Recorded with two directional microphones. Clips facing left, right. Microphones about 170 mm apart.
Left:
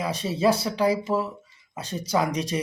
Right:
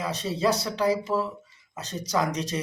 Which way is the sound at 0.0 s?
10° left (ahead or behind).